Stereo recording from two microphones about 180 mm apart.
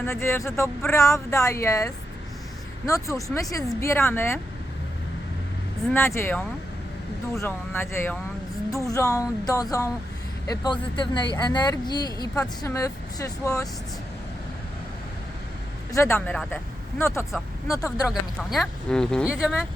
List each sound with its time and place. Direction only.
0.0 s speech: 15° left (ahead or behind)
5.9 s speech: 15° left (ahead or behind)
15.9 s speech: 15° left (ahead or behind)
18.1 s speech: centre (ahead or behind)